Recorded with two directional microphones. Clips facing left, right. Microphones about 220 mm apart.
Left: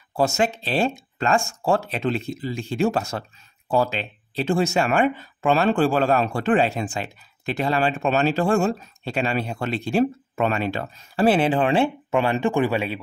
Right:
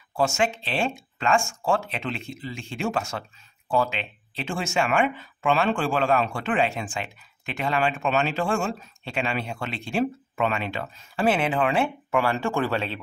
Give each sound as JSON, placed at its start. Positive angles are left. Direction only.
{"t": 0.1, "sound": "speech", "side_deg": 40}